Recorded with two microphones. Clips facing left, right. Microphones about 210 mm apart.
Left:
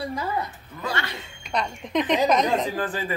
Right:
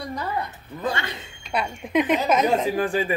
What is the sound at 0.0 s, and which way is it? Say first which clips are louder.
Speech: left 1 dB; 5° left (ahead or behind).